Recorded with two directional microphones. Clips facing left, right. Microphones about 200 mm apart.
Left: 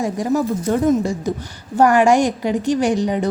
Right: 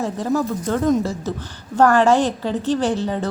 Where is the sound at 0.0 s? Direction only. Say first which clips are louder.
Left 2 dB; 15° left (ahead or behind).